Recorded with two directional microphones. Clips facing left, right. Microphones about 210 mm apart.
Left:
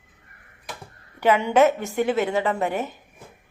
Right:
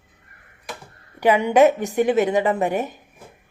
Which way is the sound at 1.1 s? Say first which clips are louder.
Right 2 dB; 15° right (ahead or behind).